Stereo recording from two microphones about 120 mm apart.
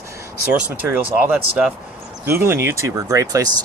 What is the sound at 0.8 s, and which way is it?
Speech, 15° right (ahead or behind).